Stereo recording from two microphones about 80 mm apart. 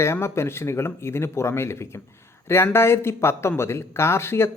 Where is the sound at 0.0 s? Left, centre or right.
Left.